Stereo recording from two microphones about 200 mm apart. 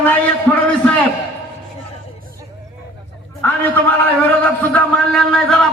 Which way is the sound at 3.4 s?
10° left (ahead or behind).